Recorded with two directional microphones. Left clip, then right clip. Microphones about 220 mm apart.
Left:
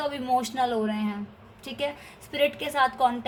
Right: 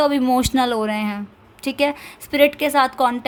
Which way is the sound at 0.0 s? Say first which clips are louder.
Right 9 dB; 50° right (ahead or behind).